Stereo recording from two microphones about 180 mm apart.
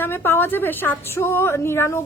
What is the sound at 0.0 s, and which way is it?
A woman's voice, 10° left (ahead or behind).